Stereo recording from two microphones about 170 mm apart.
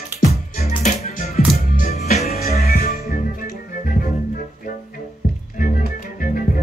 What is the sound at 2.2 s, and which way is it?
Music, 65° left (ahead or behind).